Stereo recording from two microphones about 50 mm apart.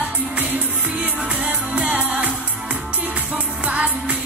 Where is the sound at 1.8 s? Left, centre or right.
Right.